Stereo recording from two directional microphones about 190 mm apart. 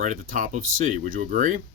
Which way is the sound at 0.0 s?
45° right (ahead or behind).